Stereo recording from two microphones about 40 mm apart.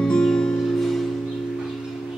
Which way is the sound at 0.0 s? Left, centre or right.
Centre.